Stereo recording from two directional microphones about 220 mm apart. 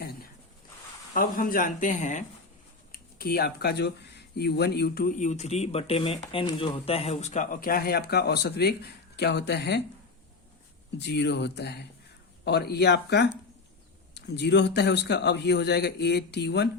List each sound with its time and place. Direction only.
0.0 s a sound: 45° left (ahead or behind)
1.1 s speech: 40° left (ahead or behind)
10.9 s speech: 50° left (ahead or behind)